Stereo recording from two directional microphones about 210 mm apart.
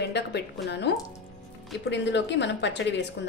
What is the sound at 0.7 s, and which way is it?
Speech, 55° left (ahead or behind).